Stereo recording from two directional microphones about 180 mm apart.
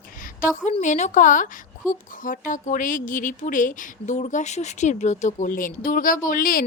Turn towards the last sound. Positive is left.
turn(degrees=50)  # may be behind; listen again after turning